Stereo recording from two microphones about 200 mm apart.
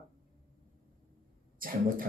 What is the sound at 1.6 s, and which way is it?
Speech, 45° right (ahead or behind).